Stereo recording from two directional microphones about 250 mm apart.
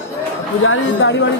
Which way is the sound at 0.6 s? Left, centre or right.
Left.